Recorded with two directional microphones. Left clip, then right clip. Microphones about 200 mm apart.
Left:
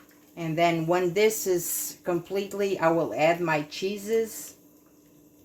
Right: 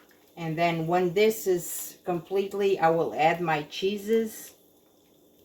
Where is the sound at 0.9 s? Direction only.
60° left (ahead or behind).